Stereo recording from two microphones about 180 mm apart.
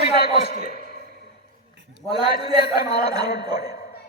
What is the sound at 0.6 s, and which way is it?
Speech, 55° left (ahead or behind).